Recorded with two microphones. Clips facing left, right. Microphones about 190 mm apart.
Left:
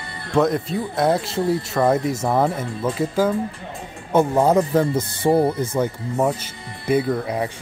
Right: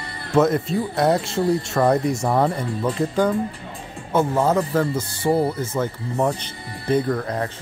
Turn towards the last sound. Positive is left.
turn(degrees=10)  # may be behind; listen again after turning